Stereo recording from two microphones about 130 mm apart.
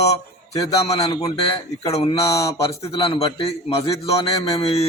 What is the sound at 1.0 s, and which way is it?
Speech, 30° left (ahead or behind).